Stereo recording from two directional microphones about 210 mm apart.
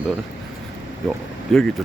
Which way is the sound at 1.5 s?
Centre (ahead or behind).